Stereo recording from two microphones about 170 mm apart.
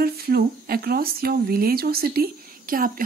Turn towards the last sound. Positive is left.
turn(degrees=-55)  # may be behind; listen again after turning